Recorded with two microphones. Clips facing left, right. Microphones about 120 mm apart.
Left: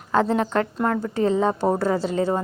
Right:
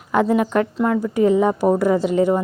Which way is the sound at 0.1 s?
15° right (ahead or behind).